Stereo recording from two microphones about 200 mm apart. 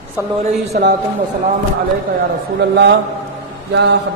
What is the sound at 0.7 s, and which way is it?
Speech, 55° right (ahead or behind).